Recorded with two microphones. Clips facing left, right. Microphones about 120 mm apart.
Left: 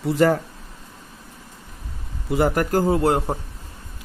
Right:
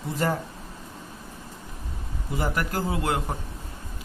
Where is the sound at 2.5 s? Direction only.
45° left (ahead or behind).